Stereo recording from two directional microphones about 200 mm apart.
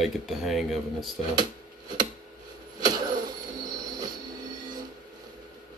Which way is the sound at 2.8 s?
20° right (ahead or behind).